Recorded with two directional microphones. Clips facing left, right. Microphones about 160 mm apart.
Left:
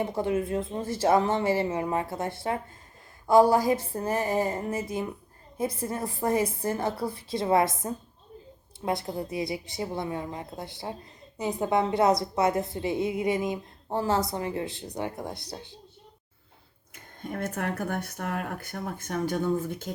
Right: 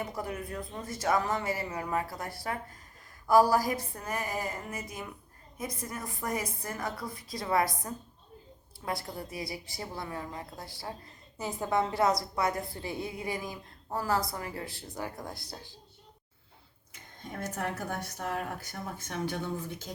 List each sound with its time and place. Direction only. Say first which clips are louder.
0.0 s a woman's voice: left 9 dB; 25° left (ahead or behind)
17.4 s speech: left 4 dB; 60° left (ahead or behind)